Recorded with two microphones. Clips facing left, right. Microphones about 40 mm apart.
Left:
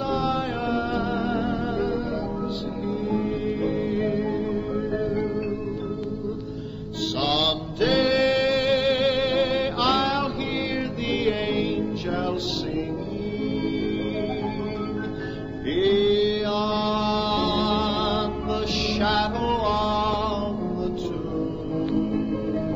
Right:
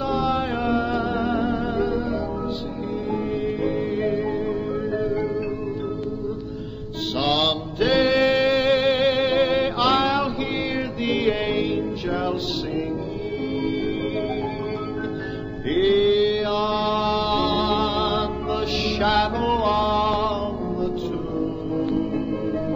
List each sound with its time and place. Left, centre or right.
0.1 s music: centre
3.1 s music: centre
7.2 s music: centre
15.7 s mantra: centre
21.4 s music: centre